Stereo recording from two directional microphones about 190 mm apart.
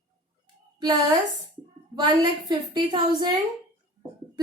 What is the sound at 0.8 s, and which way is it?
A woman's voice, 20° right (ahead or behind).